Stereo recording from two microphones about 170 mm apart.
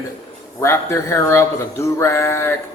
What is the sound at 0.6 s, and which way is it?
Speech, 15° left (ahead or behind).